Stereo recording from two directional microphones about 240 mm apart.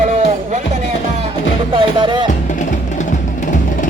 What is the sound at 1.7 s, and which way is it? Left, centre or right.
Music, right.